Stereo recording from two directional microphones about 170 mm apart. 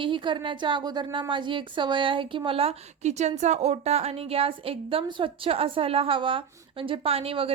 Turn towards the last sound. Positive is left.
turn(degrees=-35)  # may be behind; listen again after turning